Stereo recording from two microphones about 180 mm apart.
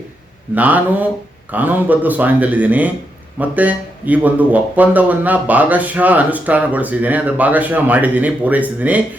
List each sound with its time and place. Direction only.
0.5 s speech: 10° right (ahead or behind)